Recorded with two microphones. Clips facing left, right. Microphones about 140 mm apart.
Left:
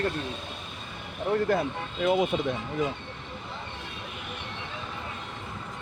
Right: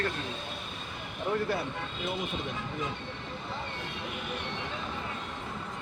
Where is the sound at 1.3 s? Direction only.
35° left (ahead or behind).